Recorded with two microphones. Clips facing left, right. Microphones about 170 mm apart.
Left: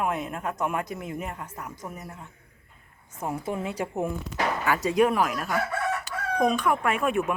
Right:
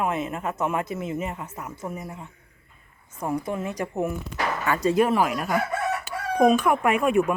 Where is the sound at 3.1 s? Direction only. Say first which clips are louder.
Right 3 dB; 5° left (ahead or behind).